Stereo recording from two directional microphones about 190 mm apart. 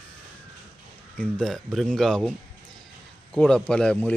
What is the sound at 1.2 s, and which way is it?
Speech, 5° left (ahead or behind).